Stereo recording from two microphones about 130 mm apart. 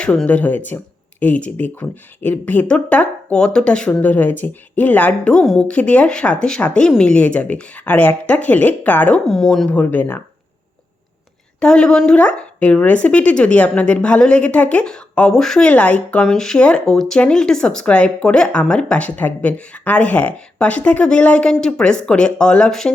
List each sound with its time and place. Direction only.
0.0 s speech: 10° left (ahead or behind)
11.6 s speech: 5° left (ahead or behind)